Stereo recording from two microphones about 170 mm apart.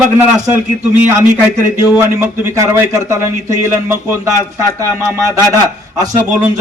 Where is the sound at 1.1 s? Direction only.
15° right (ahead or behind).